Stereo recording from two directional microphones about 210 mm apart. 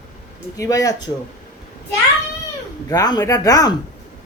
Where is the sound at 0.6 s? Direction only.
15° left (ahead or behind).